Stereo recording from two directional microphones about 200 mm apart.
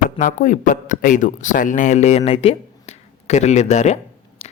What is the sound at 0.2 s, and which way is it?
A man's voice, 40° left (ahead or behind).